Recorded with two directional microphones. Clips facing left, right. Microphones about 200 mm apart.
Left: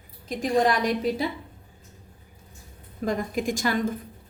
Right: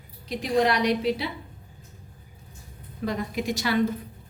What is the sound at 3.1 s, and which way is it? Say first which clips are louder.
Speech: left 2 dB; 50° left (ahead or behind).